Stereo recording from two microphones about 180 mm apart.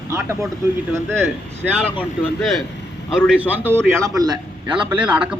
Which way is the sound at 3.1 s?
5° right (ahead or behind).